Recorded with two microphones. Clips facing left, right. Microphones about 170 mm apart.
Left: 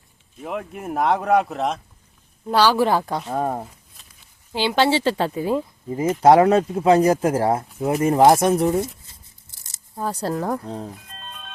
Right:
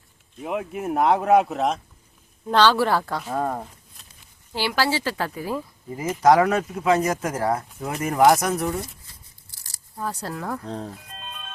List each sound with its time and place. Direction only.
0.4 s speech: 5° right (ahead or behind)
2.5 s a woman's voice: 10° left (ahead or behind); by 8.9 s 25° left (ahead or behind)
9.0 s scissors: 20° left (ahead or behind)
10.0 s speech: 30° left (ahead or behind)
10.7 s speech: 5° left (ahead or behind)
11.2 s music: centre (ahead or behind)